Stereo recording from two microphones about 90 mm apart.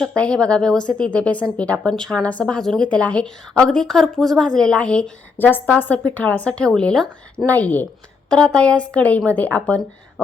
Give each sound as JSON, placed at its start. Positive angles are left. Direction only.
{"t": 0.2, "sound": "a woman's voice", "side_deg": 10}
{"t": 5.4, "sound": "a woman's voice", "side_deg": 20}